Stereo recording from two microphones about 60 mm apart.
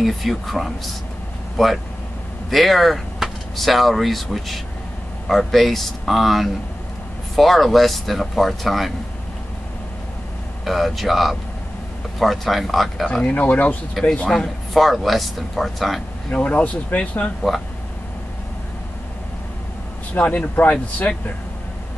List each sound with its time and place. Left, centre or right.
0.0 s speech: centre
2.5 s speech: centre
10.6 s speech: centre
13.3 s speech: left
14.0 s speech: centre
16.3 s speech: left
20.2 s speech: left